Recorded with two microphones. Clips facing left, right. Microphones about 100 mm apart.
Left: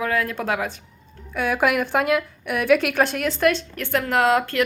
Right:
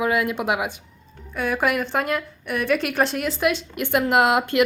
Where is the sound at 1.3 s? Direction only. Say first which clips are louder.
Left 2 dB; centre (ahead or behind).